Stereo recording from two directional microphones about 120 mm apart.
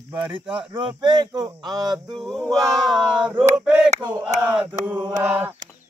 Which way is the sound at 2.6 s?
5° right (ahead or behind).